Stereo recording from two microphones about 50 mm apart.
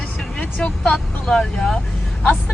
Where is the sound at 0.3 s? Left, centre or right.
Centre.